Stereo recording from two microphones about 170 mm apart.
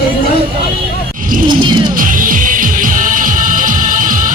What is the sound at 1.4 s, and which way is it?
Music, 25° right (ahead or behind).